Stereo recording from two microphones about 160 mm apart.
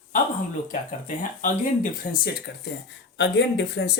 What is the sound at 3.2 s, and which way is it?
Speech, 90° left.